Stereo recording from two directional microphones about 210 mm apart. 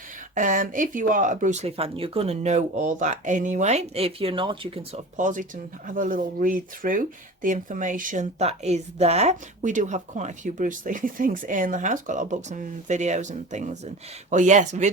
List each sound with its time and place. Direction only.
0.3 s speech: 40° right (ahead or behind)